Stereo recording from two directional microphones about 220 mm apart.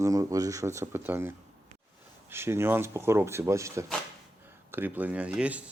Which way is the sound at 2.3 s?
10° right (ahead or behind).